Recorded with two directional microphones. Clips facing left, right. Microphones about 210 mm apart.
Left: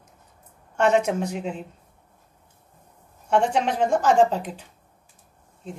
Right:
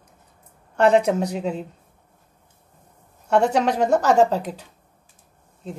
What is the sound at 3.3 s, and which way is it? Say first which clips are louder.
A woman's voice: right 3 dB; 40° right (ahead or behind).